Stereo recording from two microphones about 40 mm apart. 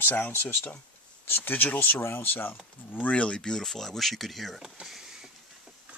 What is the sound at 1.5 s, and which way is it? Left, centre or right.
Speech, left.